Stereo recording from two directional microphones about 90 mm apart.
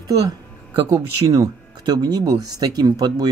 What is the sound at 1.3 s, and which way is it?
Speech, 45° right (ahead or behind).